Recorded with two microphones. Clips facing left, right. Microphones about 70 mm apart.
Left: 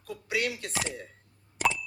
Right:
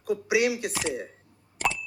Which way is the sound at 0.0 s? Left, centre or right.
Centre.